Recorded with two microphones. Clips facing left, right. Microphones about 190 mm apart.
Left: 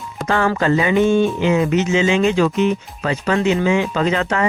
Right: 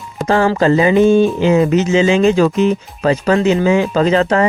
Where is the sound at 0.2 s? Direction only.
30° right (ahead or behind).